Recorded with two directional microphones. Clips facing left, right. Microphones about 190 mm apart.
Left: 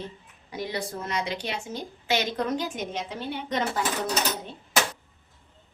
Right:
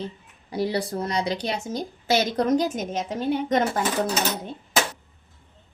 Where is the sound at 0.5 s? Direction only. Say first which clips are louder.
Right 7 dB; 35° right (ahead or behind).